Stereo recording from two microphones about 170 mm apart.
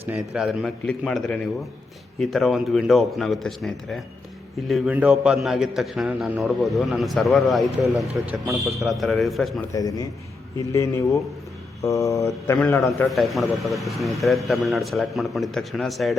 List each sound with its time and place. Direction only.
0.3 s a man's voice: centre (ahead or behind)
9.7 s a man's voice: 20° left (ahead or behind)
10.7 s mantra: 15° left (ahead or behind)
12.9 s a man's voice: centre (ahead or behind)